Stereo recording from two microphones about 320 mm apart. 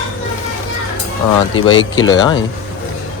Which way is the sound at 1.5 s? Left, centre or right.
Left.